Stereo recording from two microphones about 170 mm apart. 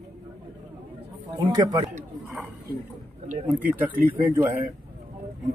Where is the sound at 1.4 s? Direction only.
25° right (ahead or behind).